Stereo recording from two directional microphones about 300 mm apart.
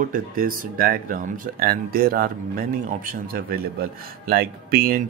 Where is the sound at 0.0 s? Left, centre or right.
Right.